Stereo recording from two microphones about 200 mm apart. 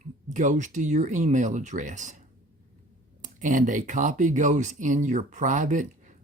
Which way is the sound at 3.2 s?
40° right (ahead or behind).